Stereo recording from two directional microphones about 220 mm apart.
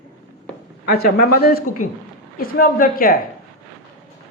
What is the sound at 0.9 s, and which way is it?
A woman's voice, 45° left (ahead or behind).